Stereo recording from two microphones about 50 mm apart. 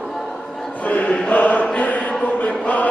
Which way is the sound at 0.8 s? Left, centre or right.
Left.